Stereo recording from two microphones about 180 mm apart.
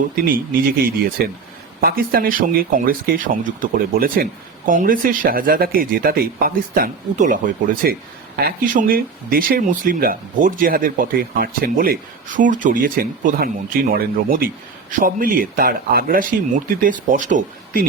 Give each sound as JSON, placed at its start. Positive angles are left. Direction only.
{"t": 0.3, "sound": "speech", "side_deg": -55}